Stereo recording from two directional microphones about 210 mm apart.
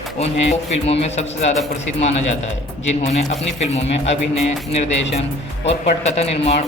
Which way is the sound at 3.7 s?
30° left (ahead or behind).